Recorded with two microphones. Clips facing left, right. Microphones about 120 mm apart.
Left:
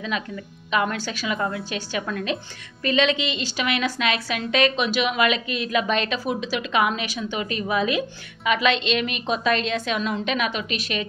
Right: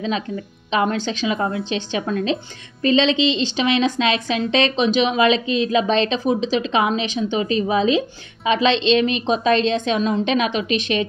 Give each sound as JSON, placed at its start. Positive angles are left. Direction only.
{"t": 0.7, "sound": "a woman's voice", "side_deg": -30}